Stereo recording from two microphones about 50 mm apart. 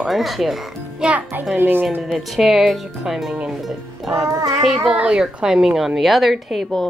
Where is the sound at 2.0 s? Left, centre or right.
Centre.